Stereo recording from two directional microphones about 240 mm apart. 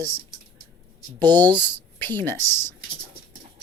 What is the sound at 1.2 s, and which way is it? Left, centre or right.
Speech, centre.